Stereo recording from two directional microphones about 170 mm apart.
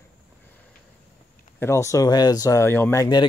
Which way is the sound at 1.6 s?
15° left (ahead or behind).